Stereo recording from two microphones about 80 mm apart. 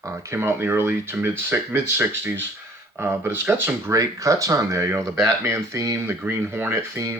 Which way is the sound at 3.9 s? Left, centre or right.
Right.